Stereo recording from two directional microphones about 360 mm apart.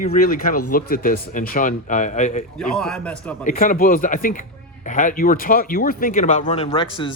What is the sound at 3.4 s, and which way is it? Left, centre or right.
Speech, left.